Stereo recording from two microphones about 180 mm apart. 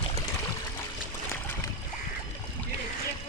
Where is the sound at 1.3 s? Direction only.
15° left (ahead or behind).